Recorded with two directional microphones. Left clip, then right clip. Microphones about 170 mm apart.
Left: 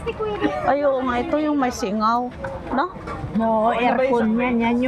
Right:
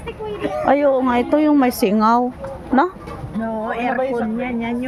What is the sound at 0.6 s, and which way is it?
Speech, 90° right.